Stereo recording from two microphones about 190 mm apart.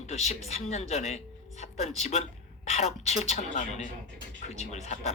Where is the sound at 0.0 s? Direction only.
35° left (ahead or behind).